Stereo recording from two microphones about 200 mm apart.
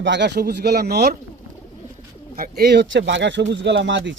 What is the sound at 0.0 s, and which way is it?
Speech, 60° right (ahead or behind).